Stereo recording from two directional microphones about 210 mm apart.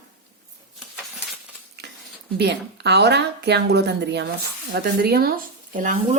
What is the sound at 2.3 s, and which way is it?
A woman's voice, 50° right (ahead or behind).